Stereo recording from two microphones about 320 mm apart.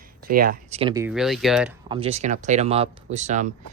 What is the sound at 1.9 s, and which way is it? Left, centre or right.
Speech, centre.